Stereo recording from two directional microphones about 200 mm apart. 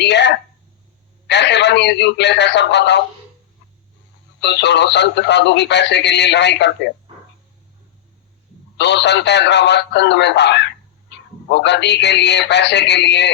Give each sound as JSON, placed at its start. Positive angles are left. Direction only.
{"t": 0.0, "sound": "speech", "side_deg": 60}
{"t": 4.4, "sound": "speech", "side_deg": 60}
{"t": 8.8, "sound": "speech", "side_deg": 60}